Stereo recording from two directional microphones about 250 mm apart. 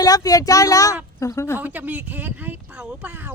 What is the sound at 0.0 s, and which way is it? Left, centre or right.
Speech, centre.